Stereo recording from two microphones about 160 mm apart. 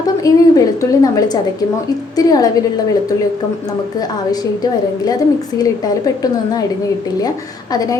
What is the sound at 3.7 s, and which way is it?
A woman's voice, 25° left (ahead or behind).